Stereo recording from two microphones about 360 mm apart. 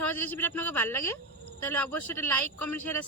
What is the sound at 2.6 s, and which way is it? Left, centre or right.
Speech, left.